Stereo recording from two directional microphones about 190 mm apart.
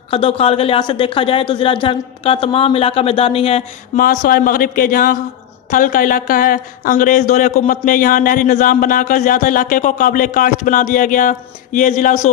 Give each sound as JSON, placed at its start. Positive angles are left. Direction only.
{"t": 0.1, "sound": "speech", "side_deg": 30}
{"t": 3.9, "sound": "speech", "side_deg": 45}